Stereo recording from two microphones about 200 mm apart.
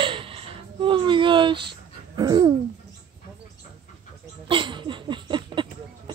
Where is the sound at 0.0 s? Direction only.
25° right (ahead or behind).